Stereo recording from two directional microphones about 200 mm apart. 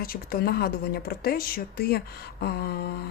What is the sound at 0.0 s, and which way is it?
Speech, 50° left (ahead or behind).